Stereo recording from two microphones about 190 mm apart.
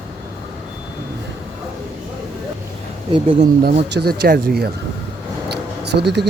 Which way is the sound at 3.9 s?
55° right (ahead or behind).